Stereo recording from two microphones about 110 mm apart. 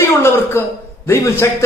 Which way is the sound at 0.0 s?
20° left (ahead or behind).